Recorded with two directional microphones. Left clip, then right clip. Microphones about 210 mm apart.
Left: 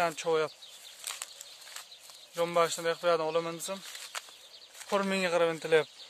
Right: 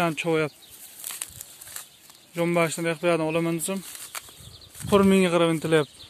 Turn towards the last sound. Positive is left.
turn(degrees=5)  # may be behind; listen again after turning